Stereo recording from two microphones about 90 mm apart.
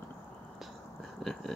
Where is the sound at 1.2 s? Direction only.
Centre (ahead or behind).